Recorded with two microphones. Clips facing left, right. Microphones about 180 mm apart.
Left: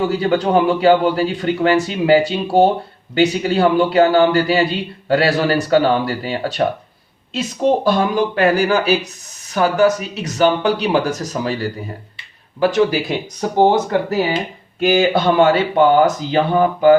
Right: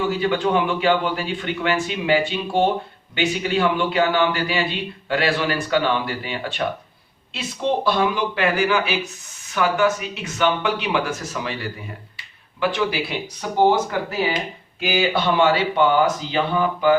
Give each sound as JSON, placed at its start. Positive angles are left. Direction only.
{"t": 0.2, "sound": "a man's voice", "side_deg": 40}
{"t": 14.8, "sound": "speech", "side_deg": 45}